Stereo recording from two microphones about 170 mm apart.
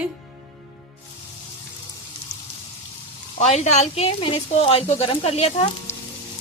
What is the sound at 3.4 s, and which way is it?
Speech, 40° left (ahead or behind).